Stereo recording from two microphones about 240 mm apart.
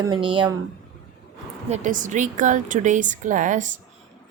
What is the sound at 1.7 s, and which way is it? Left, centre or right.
A woman's voice, right.